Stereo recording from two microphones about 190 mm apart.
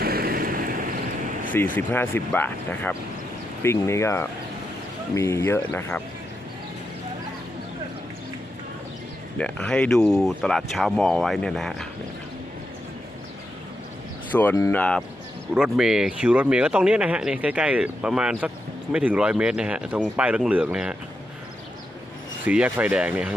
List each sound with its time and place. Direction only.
0.0 s vehicle: 50° right (ahead or behind)
1.5 s speech: 10° left (ahead or behind)
9.4 s speech: 5° left (ahead or behind)
14.3 s speech: 10° left (ahead or behind); by 20.9 s 5° right (ahead or behind)
22.4 s speech: 5° right (ahead or behind)